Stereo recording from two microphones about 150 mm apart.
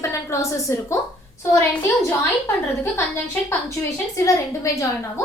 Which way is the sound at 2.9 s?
15° left (ahead or behind).